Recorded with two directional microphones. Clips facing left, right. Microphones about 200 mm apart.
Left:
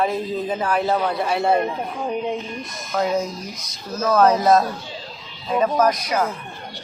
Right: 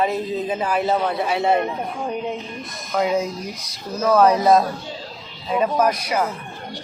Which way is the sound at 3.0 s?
10° right (ahead or behind).